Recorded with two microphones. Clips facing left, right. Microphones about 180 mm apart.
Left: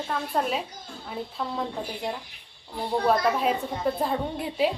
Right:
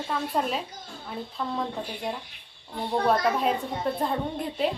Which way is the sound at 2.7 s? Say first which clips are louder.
Left 1 dB; centre (ahead or behind).